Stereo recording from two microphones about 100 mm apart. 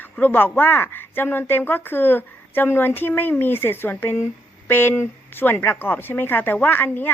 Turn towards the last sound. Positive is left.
turn(degrees=20)  # may be behind; listen again after turning